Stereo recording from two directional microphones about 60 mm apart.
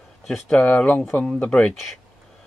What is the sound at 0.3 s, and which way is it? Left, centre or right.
A man's voice, centre.